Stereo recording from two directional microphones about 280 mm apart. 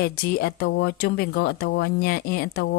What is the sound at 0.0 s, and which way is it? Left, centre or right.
Speech, left.